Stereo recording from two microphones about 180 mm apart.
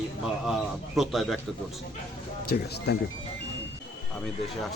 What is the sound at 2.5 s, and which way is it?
Speech, 65° left (ahead or behind).